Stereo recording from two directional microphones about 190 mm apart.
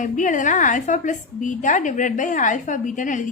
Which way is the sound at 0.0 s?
40° left (ahead or behind).